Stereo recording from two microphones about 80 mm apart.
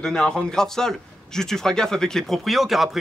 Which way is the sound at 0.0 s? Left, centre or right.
Centre.